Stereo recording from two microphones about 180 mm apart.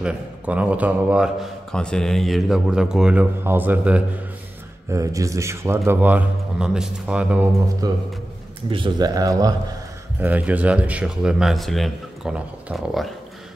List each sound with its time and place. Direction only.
0.0 s a man's voice: 5° right (ahead or behind)
7.8 s speech: 20° right (ahead or behind)
10.2 s a man's voice: 10° right (ahead or behind)